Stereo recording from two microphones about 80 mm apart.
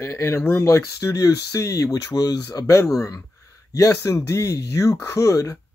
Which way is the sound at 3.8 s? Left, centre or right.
Left.